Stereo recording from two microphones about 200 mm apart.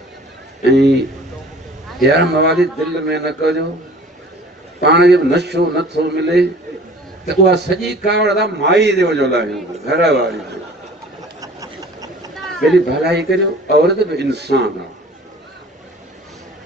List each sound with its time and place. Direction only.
0.7 s a man's voice: 60° right (ahead or behind)
2.0 s a man's voice: 55° right (ahead or behind)
4.8 s a man's voice: 55° right (ahead or behind)
11.4 s a sound: 15° right (ahead or behind)
12.4 s a sound: centre (ahead or behind)
12.7 s a man's voice: 55° right (ahead or behind)